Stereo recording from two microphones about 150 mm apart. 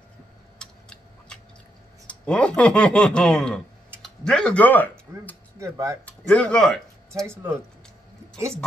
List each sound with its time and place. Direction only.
0.6 s a sound: 5° left (ahead or behind)
2.0 s speech: 5° left (ahead or behind)
5.6 s speech: 20° right (ahead or behind)
6.0 s speech: 10° left (ahead or behind)